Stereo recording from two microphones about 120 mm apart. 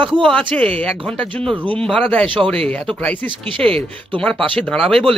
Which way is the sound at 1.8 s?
10° left (ahead or behind).